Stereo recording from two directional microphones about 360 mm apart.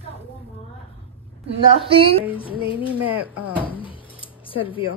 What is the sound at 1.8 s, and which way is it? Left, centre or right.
Speech, centre.